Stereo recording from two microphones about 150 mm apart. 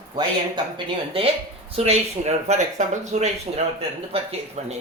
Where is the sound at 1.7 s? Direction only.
45° right (ahead or behind).